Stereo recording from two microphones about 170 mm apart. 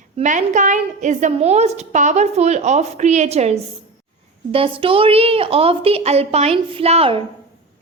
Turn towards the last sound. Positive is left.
turn(degrees=-35)  # may be behind; listen again after turning